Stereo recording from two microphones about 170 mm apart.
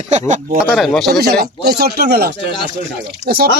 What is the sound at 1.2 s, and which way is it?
Speech, 70° right (ahead or behind).